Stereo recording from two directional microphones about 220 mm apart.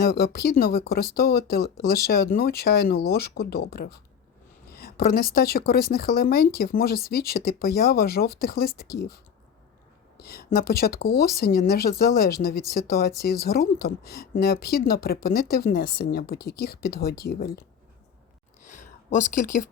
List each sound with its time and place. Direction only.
0.0 s speech: 45° left (ahead or behind)
10.2 s speech: 45° left (ahead or behind)
18.6 s a sound: 35° left (ahead or behind)